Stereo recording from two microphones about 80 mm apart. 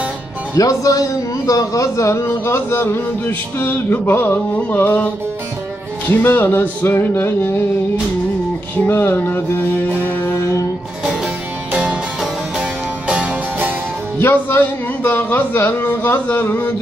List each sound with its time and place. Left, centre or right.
0.6 s a man's voice: left
8.7 s a man's voice: left
11.7 s music: centre
13.0 s music: centre
14.2 s a man's voice: left